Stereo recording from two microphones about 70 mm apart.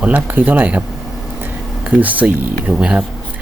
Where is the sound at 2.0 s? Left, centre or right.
Right.